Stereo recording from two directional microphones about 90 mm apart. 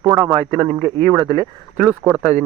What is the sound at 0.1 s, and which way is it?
Speech, 60° right (ahead or behind).